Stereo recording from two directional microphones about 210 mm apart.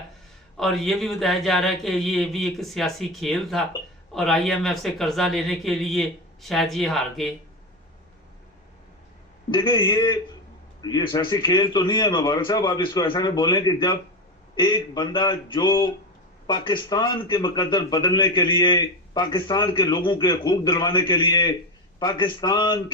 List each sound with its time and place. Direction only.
0.5 s speech: centre (ahead or behind)
9.5 s a man's voice: 20° left (ahead or behind)